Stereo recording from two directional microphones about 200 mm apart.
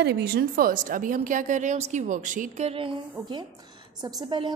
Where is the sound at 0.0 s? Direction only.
55° right (ahead or behind).